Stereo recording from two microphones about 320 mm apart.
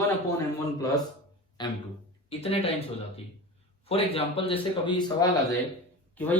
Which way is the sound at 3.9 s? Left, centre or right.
Centre.